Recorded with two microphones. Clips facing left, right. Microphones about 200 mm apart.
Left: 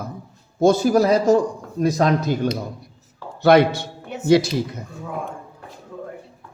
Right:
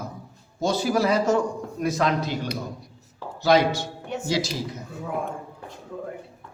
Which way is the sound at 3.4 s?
60° left (ahead or behind).